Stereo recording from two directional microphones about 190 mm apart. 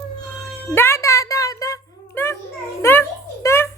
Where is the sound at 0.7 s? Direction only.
15° left (ahead or behind).